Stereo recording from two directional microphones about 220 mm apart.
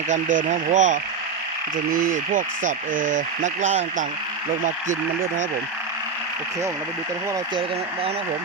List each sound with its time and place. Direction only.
0.4 s speech: 35° right (ahead or behind)